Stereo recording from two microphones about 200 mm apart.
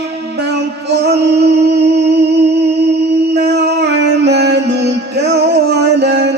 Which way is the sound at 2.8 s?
55° right (ahead or behind).